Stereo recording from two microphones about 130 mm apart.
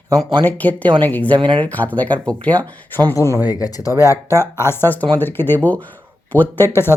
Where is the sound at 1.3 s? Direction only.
40° right (ahead or behind).